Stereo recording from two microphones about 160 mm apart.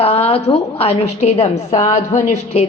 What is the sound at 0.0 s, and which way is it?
A woman's voice, 40° left (ahead or behind).